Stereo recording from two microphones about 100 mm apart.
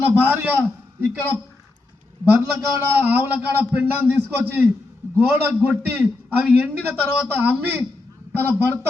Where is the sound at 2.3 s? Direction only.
20° right (ahead or behind).